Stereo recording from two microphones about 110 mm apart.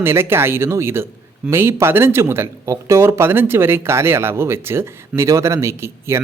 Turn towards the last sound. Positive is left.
turn(degrees=-25)  # may be behind; listen again after turning